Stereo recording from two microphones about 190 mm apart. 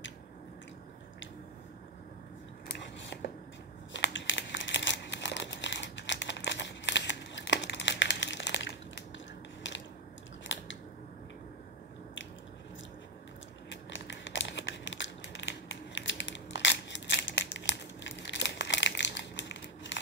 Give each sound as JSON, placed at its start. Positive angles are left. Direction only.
{"t": 3.9, "sound": "crumpling", "side_deg": 75}
{"t": 13.7, "sound": "crumpling", "side_deg": 70}